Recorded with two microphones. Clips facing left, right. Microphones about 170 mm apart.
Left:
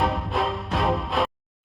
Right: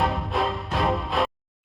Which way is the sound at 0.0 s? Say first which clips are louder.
Even; centre (ahead or behind).